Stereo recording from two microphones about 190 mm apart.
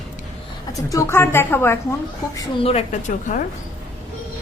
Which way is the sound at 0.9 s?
15° left (ahead or behind).